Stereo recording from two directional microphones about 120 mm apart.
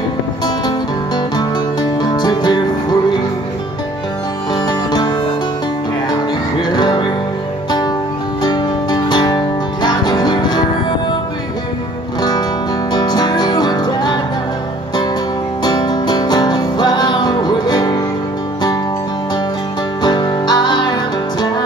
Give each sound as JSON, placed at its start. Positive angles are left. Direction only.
{"t": 0.7, "sound": "music", "side_deg": 35}
{"t": 4.6, "sound": "music", "side_deg": 35}
{"t": 6.7, "sound": "music", "side_deg": 40}
{"t": 8.4, "sound": "music", "side_deg": 35}
{"t": 12.2, "sound": "music", "side_deg": 35}
{"t": 15.6, "sound": "music", "side_deg": 35}
{"t": 20.0, "sound": "music", "side_deg": 35}